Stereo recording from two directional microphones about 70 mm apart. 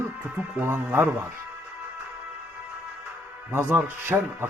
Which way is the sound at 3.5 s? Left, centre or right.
Right.